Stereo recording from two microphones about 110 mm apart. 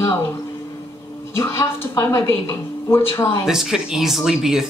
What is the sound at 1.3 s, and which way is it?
A woman's voice, 25° left (ahead or behind).